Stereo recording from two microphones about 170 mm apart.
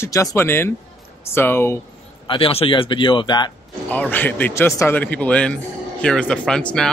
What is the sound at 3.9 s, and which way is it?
Speech, 10° left (ahead or behind).